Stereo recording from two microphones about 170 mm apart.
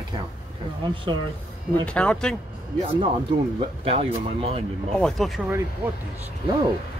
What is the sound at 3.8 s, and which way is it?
Speech, 35° right (ahead or behind).